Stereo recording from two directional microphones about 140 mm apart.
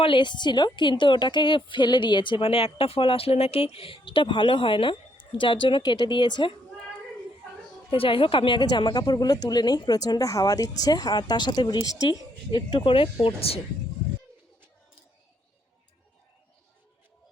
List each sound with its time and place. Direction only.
0.0 s a woman's voice: 35° left (ahead or behind)
7.9 s a woman's voice: 40° left (ahead or behind)